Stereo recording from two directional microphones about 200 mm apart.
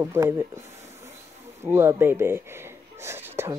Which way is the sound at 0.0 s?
15° right (ahead or behind).